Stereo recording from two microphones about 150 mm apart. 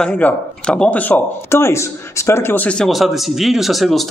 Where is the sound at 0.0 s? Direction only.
10° left (ahead or behind).